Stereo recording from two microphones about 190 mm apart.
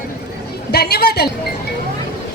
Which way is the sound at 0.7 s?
55° left (ahead or behind).